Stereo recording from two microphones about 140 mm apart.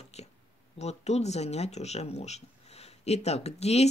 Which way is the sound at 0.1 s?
50° left (ahead or behind).